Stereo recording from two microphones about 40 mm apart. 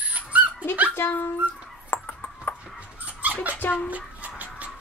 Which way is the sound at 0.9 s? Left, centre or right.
Left.